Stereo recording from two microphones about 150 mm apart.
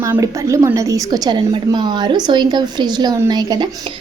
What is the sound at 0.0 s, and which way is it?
A woman's voice, 20° right (ahead or behind).